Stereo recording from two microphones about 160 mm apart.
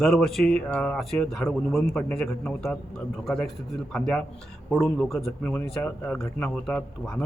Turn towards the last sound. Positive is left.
turn(degrees=5)  # may be behind; listen again after turning